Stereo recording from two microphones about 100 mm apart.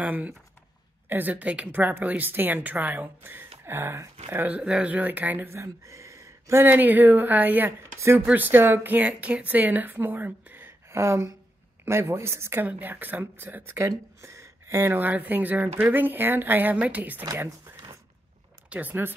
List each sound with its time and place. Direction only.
0.0 s a woman's voice: 15° right (ahead or behind)
18.7 s a woman's voice: 15° right (ahead or behind)